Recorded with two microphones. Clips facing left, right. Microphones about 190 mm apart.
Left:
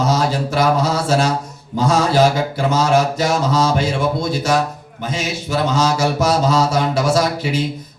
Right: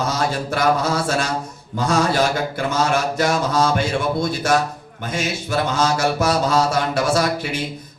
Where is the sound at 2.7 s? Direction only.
55° right (ahead or behind).